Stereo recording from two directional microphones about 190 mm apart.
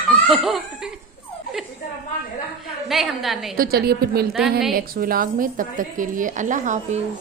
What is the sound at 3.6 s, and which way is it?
A woman's voice, 55° right (ahead or behind).